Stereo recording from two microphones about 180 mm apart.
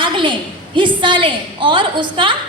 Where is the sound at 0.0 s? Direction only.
25° right (ahead or behind).